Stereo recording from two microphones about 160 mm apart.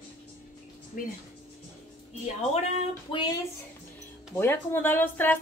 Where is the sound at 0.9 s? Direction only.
60° left (ahead or behind).